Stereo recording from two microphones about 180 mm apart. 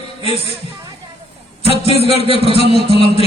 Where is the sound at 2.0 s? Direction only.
35° left (ahead or behind).